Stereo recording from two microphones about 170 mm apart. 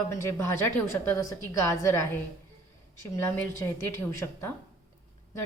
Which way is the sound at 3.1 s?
10° left (ahead or behind).